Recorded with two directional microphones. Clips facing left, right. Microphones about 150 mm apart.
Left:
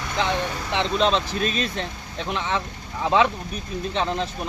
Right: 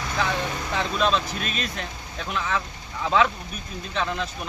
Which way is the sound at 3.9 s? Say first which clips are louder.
Left 2 dB; 30° left (ahead or behind).